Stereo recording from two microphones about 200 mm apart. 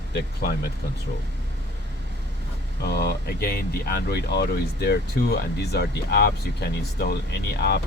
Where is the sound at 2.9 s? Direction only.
55° left (ahead or behind).